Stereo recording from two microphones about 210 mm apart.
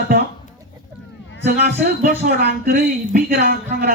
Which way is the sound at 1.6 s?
45° right (ahead or behind).